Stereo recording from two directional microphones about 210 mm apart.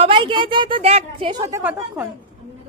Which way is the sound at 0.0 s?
25° right (ahead or behind).